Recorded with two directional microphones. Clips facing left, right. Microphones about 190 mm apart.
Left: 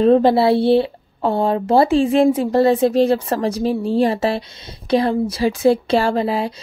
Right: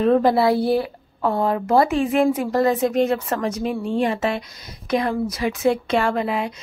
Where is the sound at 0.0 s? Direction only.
30° left (ahead or behind).